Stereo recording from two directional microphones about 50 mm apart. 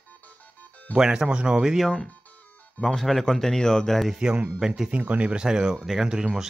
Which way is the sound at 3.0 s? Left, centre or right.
Centre.